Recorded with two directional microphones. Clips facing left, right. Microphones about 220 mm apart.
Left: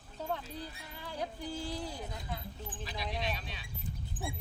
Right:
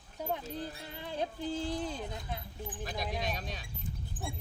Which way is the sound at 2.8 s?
50° right (ahead or behind).